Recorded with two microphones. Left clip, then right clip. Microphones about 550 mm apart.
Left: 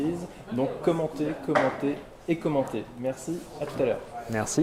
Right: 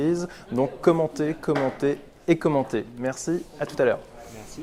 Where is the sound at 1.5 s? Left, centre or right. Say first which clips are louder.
Left 1 dB; right.